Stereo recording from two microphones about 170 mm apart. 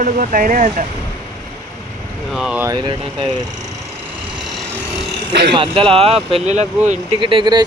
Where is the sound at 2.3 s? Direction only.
5° right (ahead or behind).